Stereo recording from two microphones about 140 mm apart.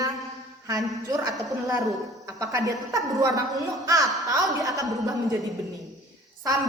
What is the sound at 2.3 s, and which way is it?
A woman's voice, 20° right (ahead or behind).